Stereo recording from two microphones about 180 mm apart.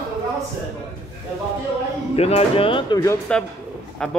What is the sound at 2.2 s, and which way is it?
Speech, 35° left (ahead or behind).